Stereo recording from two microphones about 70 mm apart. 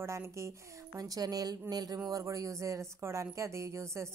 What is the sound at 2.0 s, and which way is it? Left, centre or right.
Speech, right.